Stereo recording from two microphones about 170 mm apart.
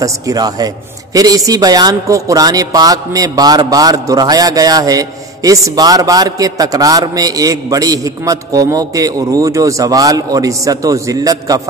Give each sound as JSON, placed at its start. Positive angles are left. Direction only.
{"t": 0.0, "sound": "a man's voice", "side_deg": -20}